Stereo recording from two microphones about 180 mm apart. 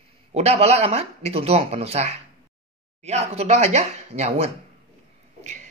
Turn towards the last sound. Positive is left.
turn(degrees=-40)  # may be behind; listen again after turning